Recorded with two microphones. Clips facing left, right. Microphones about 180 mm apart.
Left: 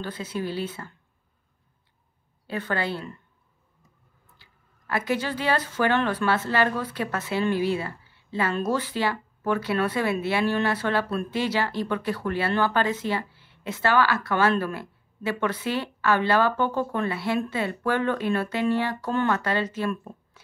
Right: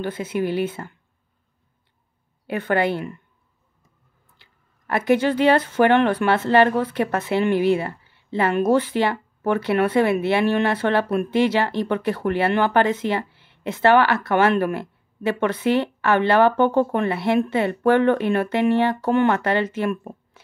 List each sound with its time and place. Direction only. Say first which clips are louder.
0.0 s a woman's voice: right 7 dB; 20° right (ahead or behind)
2.7 s a woman's voice: right 8 dB; 20° right (ahead or behind)
4.4 s a woman's voice: even; 20° right (ahead or behind)